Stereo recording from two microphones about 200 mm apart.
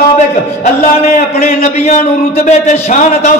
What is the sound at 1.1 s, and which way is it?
A man's voice, 40° left (ahead or behind).